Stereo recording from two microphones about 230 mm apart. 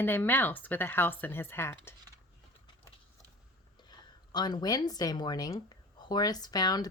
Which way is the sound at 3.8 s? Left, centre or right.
Centre.